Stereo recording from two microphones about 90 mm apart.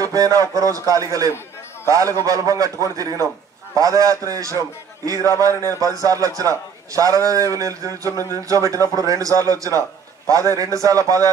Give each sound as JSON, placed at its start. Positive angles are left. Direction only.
{"t": 0.0, "sound": "a man's voice", "side_deg": -40}